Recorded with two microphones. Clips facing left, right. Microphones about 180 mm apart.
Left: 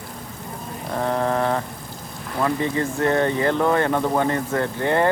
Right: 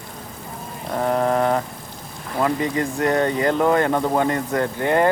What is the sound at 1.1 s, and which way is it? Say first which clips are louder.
Speech: right 3 dB; 20° right (ahead or behind).